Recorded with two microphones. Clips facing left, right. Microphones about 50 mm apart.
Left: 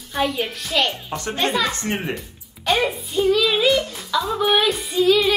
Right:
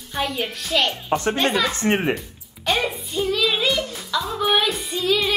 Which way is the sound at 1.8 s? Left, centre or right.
Right.